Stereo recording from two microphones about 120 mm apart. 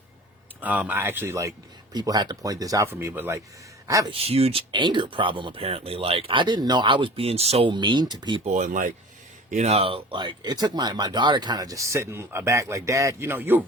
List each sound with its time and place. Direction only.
0.6 s speech: 15° right (ahead or behind); by 4.1 s 30° right (ahead or behind)
4.1 s speech: 55° right (ahead or behind)
4.7 s speech: 40° right (ahead or behind); by 7.7 s 55° right (ahead or behind)
7.7 s speech: 40° right (ahead or behind)
8.4 s speech: 90° right
9.5 s speech: 70° right (ahead or behind); by 13.6 s 20° right (ahead or behind)